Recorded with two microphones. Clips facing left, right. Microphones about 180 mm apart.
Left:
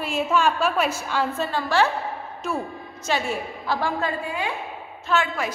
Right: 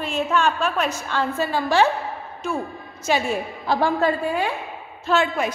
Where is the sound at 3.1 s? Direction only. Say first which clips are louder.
Right 3 dB; 15° right (ahead or behind).